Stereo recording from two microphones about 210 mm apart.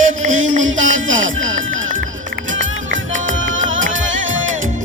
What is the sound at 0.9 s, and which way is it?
Music, 65° right (ahead or behind).